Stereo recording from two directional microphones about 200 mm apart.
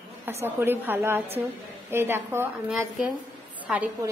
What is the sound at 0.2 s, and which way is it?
A woman's voice, 10° right (ahead or behind).